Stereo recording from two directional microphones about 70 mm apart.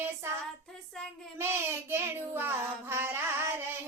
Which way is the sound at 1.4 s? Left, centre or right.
Right.